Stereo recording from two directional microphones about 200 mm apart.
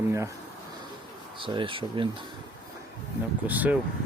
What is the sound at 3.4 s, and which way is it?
Speech, 10° right (ahead or behind).